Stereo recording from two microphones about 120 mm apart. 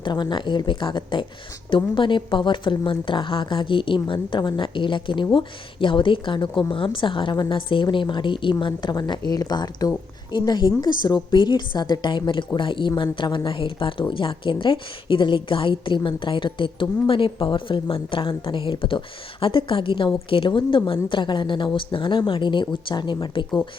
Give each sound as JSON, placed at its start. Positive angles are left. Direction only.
{"t": 0.0, "sound": "a woman's voice", "side_deg": 40}